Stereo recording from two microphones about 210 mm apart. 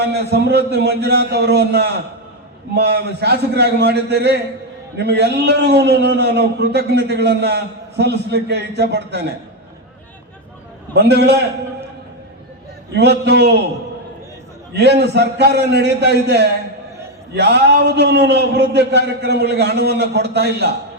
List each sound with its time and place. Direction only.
0.0 s a man's voice: 50° right (ahead or behind)
10.9 s a man's voice: 50° right (ahead or behind)
12.9 s a man's voice: 50° right (ahead or behind)
14.7 s a man's voice: 55° right (ahead or behind)